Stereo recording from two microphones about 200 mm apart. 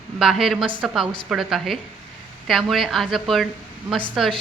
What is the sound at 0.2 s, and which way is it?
A woman's voice, centre (ahead or behind).